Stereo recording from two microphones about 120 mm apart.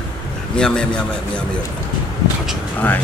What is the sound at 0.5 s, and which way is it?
Speech, 5° left (ahead or behind).